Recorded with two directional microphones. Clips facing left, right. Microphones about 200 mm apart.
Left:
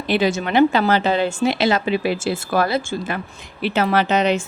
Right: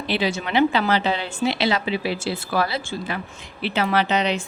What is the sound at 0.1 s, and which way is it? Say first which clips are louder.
A woman's voice: left 5 dB; 45° left (ahead or behind).